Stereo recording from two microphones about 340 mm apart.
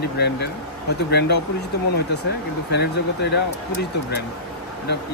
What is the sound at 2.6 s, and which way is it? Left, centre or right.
Speech, left.